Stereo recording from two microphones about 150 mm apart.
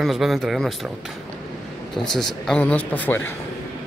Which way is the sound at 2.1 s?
5° left (ahead or behind).